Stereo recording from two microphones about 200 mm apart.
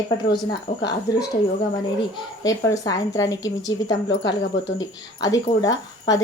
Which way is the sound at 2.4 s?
20° left (ahead or behind).